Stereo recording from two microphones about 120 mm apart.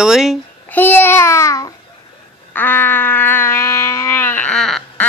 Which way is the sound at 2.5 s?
15° left (ahead or behind).